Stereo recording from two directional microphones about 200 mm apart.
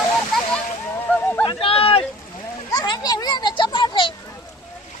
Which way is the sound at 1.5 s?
25° left (ahead or behind).